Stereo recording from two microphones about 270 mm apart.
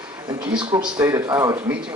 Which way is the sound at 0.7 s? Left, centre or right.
Centre.